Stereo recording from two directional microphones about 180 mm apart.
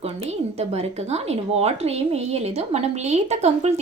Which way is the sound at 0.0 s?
35° right (ahead or behind).